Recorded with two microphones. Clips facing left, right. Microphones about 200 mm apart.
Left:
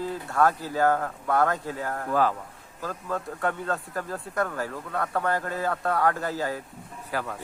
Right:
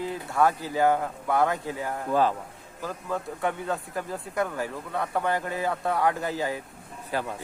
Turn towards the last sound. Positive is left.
turn(degrees=-25)  # may be behind; listen again after turning